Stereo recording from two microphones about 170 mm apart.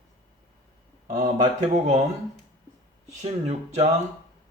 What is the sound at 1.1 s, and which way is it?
Speech, 45° right (ahead or behind).